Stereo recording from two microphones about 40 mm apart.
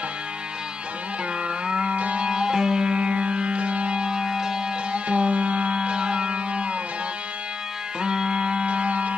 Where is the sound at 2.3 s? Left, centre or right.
Centre.